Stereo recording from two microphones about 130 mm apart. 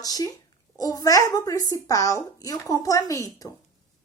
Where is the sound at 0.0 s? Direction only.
30° left (ahead or behind).